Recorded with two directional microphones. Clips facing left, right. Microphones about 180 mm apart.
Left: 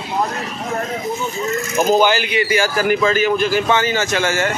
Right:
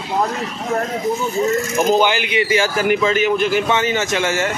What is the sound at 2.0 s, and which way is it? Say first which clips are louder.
A man's voice: left 1 dB; 20° right (ahead or behind).